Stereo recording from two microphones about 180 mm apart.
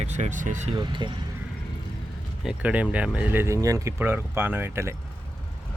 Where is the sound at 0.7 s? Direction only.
25° right (ahead or behind).